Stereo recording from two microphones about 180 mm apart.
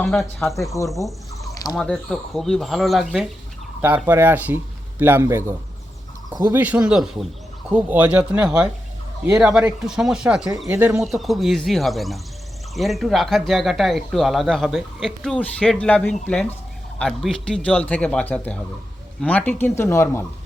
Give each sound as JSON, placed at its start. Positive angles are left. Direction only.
{"t": 0.0, "sound": "speech", "side_deg": 5}
{"t": 0.5, "sound": "speech", "side_deg": 15}
{"t": 0.9, "sound": "speech", "side_deg": 0}
{"t": 11.0, "sound": "speech", "side_deg": 0}